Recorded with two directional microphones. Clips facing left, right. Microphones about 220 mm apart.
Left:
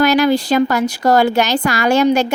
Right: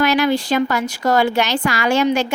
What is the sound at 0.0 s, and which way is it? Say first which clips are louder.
Speech: left 3 dB; 40° left (ahead or behind).